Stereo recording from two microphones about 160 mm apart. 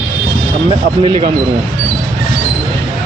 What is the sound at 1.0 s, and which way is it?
Speech, 30° right (ahead or behind).